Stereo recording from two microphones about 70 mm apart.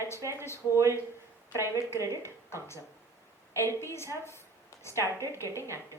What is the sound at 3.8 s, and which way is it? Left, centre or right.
A woman's voice, left.